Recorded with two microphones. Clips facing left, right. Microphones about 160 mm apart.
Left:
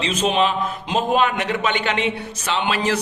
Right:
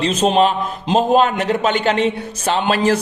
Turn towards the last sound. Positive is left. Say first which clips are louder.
# right 5 dB
turn(degrees=-40)  # may be behind; listen again after turning